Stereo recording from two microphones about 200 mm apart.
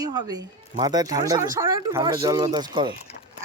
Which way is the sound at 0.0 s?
20° right (ahead or behind).